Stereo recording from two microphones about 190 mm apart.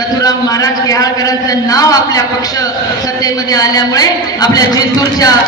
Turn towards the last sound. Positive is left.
turn(degrees=20)  # may be behind; listen again after turning